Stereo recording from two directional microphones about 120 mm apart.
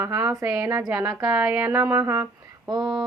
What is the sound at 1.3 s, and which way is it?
Speech, 10° right (ahead or behind).